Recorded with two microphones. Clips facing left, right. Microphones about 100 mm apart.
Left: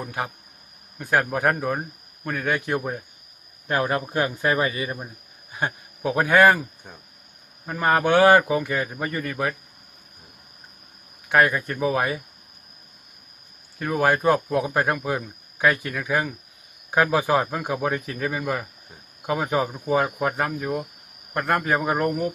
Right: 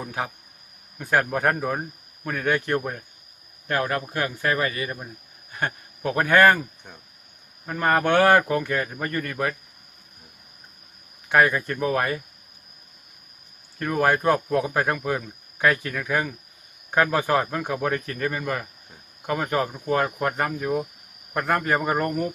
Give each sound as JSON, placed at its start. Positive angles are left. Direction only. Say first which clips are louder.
{"t": 0.0, "sound": "speech", "louder": "even", "side_deg": 0}
{"t": 3.7, "sound": "speech", "louder": "left 2 dB", "side_deg": 20}
{"t": 11.3, "sound": "speech", "louder": "even", "side_deg": 0}
{"t": 13.7, "sound": "speech", "louder": "even", "side_deg": 0}